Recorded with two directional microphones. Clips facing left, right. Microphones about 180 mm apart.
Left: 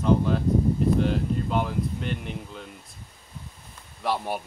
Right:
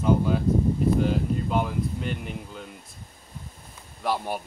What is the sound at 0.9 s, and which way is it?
Speech, 5° right (ahead or behind).